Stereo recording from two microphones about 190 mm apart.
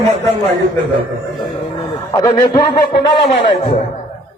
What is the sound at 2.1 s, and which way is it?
Speech, 20° left (ahead or behind).